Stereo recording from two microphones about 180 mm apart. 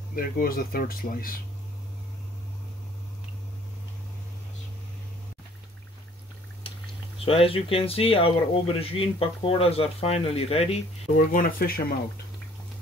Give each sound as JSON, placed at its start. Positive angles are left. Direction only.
{"t": 0.1, "sound": "speech", "side_deg": 55}
{"t": 7.2, "sound": "speech", "side_deg": 30}